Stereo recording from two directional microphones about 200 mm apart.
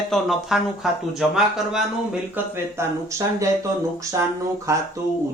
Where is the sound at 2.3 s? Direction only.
15° right (ahead or behind).